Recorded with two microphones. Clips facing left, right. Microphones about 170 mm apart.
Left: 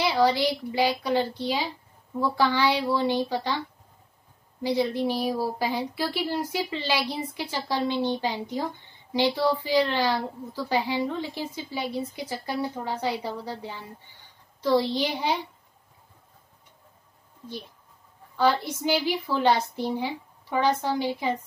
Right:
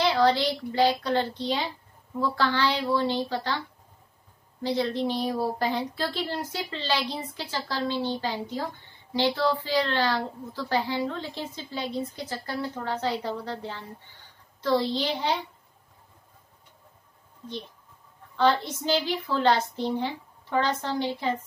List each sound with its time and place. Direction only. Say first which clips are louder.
0.0 s a woman's voice: even; 15° left (ahead or behind)
4.6 s a woman's voice: left 2 dB; 10° left (ahead or behind)
18.3 s a woman's voice: even; 10° left (ahead or behind)